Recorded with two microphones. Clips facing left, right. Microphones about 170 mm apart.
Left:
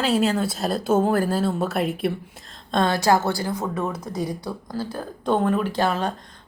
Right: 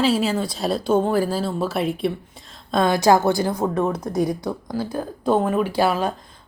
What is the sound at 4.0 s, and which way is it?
Speech, 50° right (ahead or behind).